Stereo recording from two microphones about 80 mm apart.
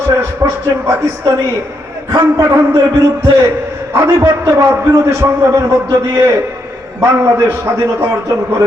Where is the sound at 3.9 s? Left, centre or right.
Right.